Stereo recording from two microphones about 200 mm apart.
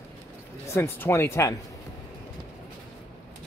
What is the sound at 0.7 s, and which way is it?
Speech, 15° left (ahead or behind).